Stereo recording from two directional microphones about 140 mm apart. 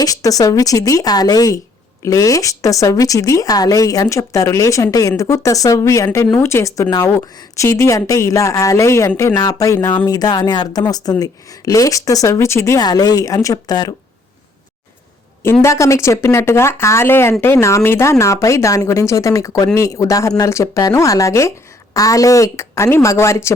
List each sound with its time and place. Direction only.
0.0 s speech: 25° left (ahead or behind)
15.6 s speech: 20° left (ahead or behind)